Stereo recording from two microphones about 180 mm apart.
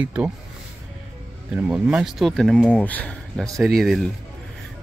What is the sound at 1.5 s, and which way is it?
Speech, 5° right (ahead or behind).